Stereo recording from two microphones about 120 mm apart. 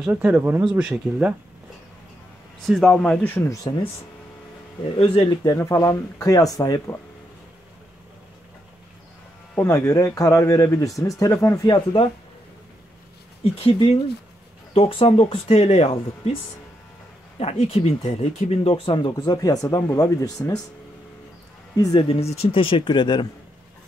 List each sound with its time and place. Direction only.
0.0 s speech: 10° right (ahead or behind)
2.6 s speech: centre (ahead or behind)
3.7 s speech: 35° left (ahead or behind)
4.9 s speech: 45° left (ahead or behind)
5.5 s speech: 25° left (ahead or behind)
9.6 s speech: 25° left (ahead or behind); by 12.1 s 40° left (ahead or behind)
13.4 s speech: 50° left (ahead or behind)
17.4 s speech: 55° left (ahead or behind); by 20.6 s 30° left (ahead or behind)
21.7 s speech: 30° left (ahead or behind)
22.0 s speech: 55° left (ahead or behind); by 23.2 s 40° left (ahead or behind)